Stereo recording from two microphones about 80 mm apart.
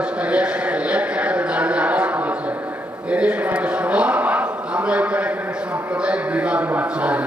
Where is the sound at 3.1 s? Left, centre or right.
Centre.